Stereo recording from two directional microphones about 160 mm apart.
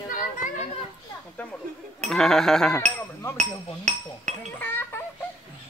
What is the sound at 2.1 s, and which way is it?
Sheep, 5° left (ahead or behind).